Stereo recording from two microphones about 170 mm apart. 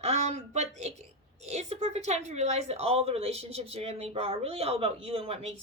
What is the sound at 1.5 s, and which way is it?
A woman's voice, 40° right (ahead or behind).